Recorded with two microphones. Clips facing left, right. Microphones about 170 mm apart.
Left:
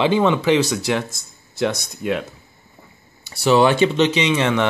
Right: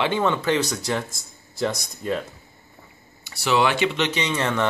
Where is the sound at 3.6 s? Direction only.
40° left (ahead or behind).